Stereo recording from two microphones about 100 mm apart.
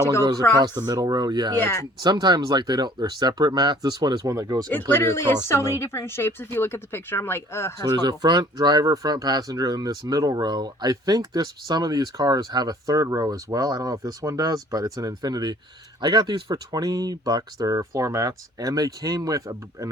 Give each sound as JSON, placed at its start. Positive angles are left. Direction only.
{"t": 0.2, "sound": "speech", "side_deg": -40}
{"t": 4.9, "sound": "speech", "side_deg": 25}
{"t": 7.9, "sound": "speech", "side_deg": -45}